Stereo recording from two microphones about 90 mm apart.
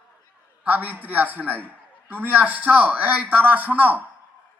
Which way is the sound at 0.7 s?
20° right (ahead or behind).